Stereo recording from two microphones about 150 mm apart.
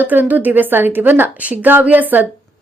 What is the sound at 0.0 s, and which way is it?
A woman's voice, 10° right (ahead or behind).